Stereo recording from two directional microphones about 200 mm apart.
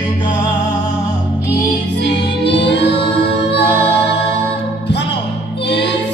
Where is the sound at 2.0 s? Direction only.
60° left (ahead or behind).